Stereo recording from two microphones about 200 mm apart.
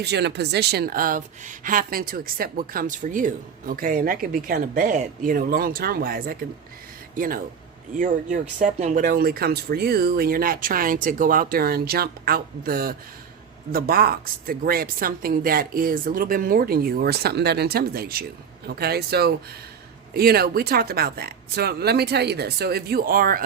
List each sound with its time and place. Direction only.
0.0 s speech: 55° right (ahead or behind)